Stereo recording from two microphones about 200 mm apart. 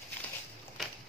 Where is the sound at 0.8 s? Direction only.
Centre (ahead or behind).